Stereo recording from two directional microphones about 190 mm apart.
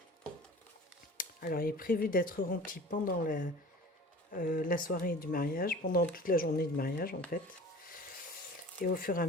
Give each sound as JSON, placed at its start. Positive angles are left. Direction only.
{"t": 1.1, "sound": "speech", "side_deg": 50}
{"t": 8.8, "sound": "speech", "side_deg": 50}